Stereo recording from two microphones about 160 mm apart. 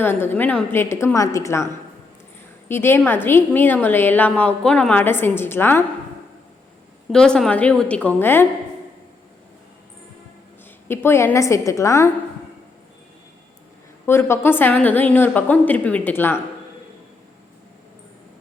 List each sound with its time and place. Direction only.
0.0 s a woman's voice: 10° left (ahead or behind)
7.1 s a woman's voice: 5° left (ahead or behind)
10.8 s a woman's voice: 15° left (ahead or behind)
14.1 s a woman's voice: 15° left (ahead or behind)